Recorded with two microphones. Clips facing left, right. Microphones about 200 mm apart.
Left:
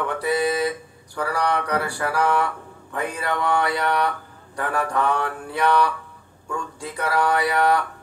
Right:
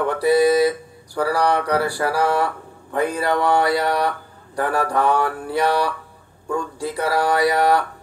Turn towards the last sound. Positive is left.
turn(degrees=-35)  # may be behind; listen again after turning